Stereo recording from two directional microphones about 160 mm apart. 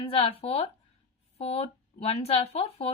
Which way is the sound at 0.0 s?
30° left (ahead or behind).